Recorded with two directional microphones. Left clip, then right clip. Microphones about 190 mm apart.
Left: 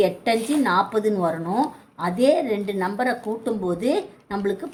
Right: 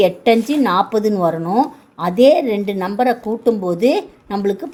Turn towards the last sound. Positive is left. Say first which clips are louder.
# right 6 dB
turn(degrees=-35)  # may be behind; listen again after turning